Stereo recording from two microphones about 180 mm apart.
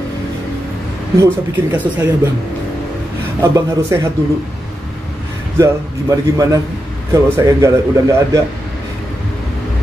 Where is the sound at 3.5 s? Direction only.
15° right (ahead or behind).